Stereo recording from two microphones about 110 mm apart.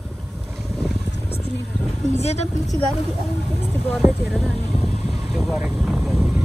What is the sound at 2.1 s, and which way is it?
Vehicle, 85° left.